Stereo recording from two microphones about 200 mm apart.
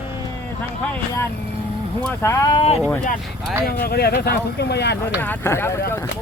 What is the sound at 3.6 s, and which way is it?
Speech, 50° left (ahead or behind).